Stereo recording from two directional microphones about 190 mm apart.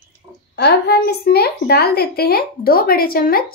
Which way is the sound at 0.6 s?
60° left (ahead or behind).